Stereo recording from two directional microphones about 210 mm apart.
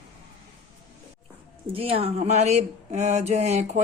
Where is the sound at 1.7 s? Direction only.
25° right (ahead or behind).